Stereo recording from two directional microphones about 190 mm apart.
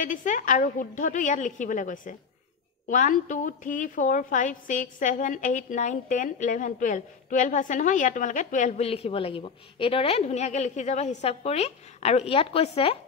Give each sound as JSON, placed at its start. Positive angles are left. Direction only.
{"t": 0.0, "sound": "a woman's voice", "side_deg": 45}